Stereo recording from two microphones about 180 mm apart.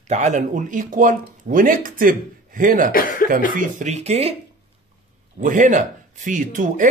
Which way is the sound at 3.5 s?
40° right (ahead or behind).